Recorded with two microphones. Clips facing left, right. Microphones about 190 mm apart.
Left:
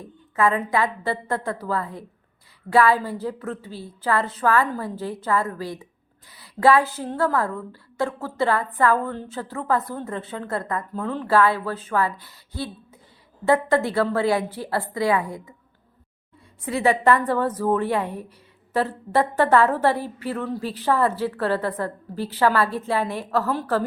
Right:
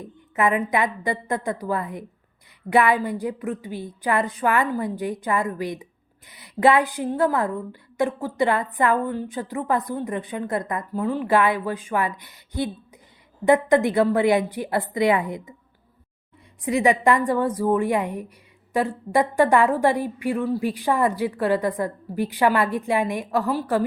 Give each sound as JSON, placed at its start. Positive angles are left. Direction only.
{"t": 0.0, "sound": "a woman's voice", "side_deg": -20}
{"t": 16.6, "sound": "a woman's voice", "side_deg": -15}